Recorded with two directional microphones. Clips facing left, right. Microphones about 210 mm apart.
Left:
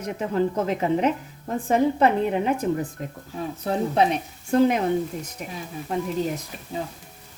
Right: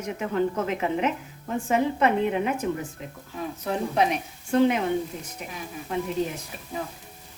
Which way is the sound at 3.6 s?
30° left (ahead or behind).